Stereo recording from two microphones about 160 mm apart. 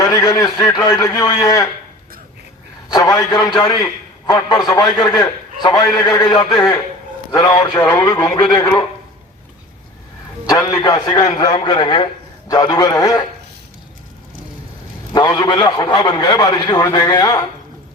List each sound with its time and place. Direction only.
0.0 s a man's voice: 20° left (ahead or behind)
2.9 s a man's voice: 25° left (ahead or behind)
10.5 s a man's voice: 25° left (ahead or behind)
15.1 s a man's voice: 25° left (ahead or behind)